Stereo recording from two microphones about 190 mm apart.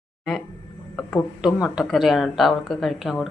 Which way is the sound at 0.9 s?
Centre (ahead or behind).